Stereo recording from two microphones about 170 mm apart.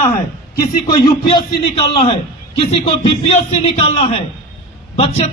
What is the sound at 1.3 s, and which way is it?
Speech, 30° left (ahead or behind).